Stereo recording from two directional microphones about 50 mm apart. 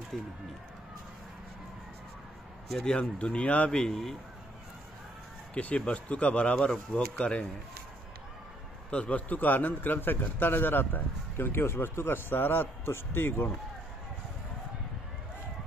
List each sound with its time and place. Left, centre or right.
0.1 s speech: centre
2.8 s speech: centre
3.7 s speech: centre
5.5 s speech: left
6.7 s speech: centre
7.2 s speech: left
8.9 s a man's voice: left